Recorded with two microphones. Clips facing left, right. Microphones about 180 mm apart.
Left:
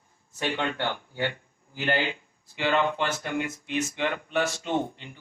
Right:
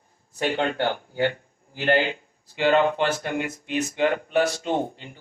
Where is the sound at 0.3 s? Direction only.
35° right (ahead or behind).